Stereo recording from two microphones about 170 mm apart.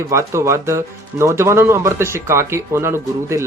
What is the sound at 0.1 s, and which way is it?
Speech, 15° right (ahead or behind).